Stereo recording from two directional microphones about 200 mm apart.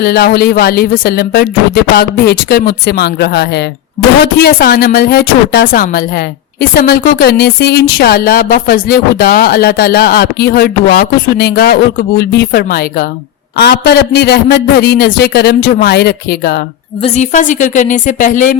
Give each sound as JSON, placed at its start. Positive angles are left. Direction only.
{"t": 0.0, "sound": "a woman's voice", "side_deg": 50}
{"t": 17.0, "sound": "a woman's voice", "side_deg": 35}